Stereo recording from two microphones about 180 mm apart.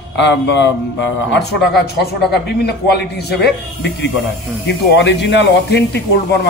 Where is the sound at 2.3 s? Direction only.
65° left (ahead or behind).